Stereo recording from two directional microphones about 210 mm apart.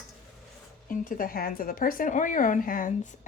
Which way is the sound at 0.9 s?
40° left (ahead or behind).